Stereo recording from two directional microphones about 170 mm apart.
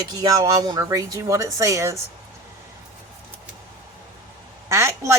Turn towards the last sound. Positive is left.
turn(degrees=-15)  # may be behind; listen again after turning